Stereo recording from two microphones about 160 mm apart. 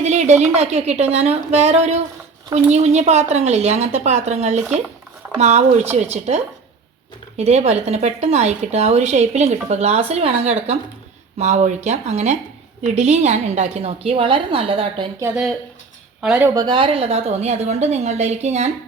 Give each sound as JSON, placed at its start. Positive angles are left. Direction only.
{"t": 0.0, "sound": "speech", "side_deg": -45}
{"t": 7.3, "sound": "a woman's voice", "side_deg": -40}
{"t": 16.2, "sound": "speech", "side_deg": -5}
{"t": 16.6, "sound": "a woman's voice", "side_deg": -30}